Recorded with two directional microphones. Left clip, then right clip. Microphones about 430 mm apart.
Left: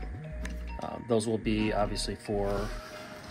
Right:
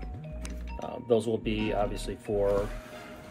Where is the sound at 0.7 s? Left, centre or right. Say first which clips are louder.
Right 2 dB; centre.